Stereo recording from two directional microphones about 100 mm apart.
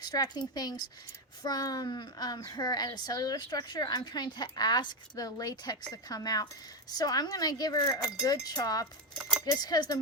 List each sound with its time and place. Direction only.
0.0 s speech: 40° left (ahead or behind)